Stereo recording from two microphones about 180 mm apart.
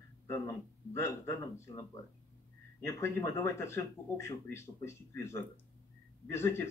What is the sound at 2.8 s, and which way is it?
Speech, 15° left (ahead or behind).